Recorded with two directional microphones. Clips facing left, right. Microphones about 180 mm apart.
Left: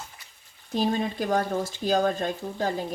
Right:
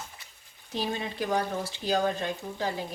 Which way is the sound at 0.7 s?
45° left (ahead or behind).